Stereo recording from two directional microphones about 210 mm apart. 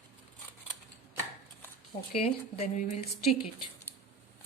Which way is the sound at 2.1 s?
30° left (ahead or behind).